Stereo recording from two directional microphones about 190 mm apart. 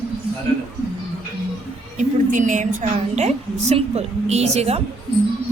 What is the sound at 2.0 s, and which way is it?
A woman's voice, 40° right (ahead or behind).